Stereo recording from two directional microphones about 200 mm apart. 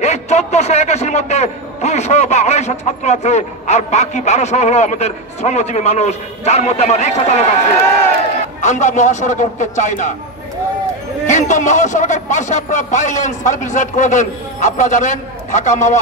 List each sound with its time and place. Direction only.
0.0 s a man's voice: 35° left (ahead or behind)
11.2 s a man's voice: 35° left (ahead or behind)